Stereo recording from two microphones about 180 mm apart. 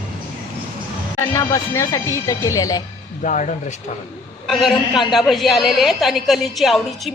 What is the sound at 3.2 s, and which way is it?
Speech, 45° left (ahead or behind).